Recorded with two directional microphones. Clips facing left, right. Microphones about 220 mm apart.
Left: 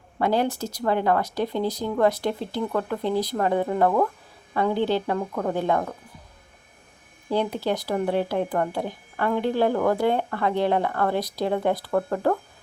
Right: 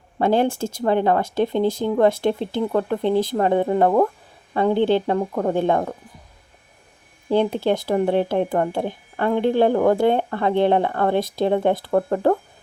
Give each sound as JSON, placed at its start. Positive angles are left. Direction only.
{"t": 0.2, "sound": "speech", "side_deg": -25}
{"t": 7.3, "sound": "speech", "side_deg": -25}